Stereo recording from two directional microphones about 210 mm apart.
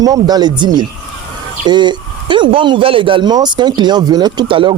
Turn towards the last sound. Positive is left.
turn(degrees=-25)  # may be behind; listen again after turning